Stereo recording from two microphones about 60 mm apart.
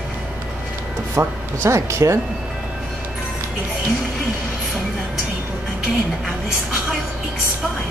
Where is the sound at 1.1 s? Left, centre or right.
Right.